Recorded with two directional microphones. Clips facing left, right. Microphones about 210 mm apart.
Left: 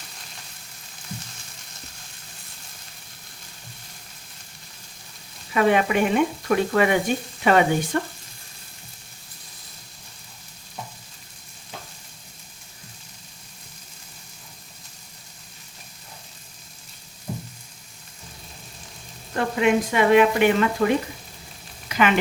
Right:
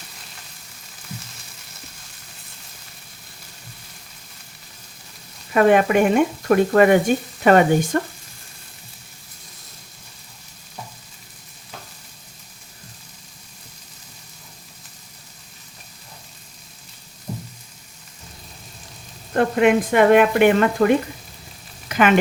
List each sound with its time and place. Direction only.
5.5 s speech: 50° right (ahead or behind)
17.3 s a sound: 5° right (ahead or behind)
19.3 s speech: 55° right (ahead or behind)
21.8 s frying: 50° right (ahead or behind)